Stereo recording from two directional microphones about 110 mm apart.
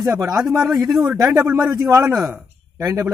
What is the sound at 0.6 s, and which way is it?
Speech, centre (ahead or behind).